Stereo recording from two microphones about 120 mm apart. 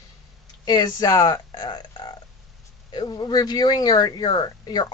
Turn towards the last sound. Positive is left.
turn(degrees=35)  # may be behind; listen again after turning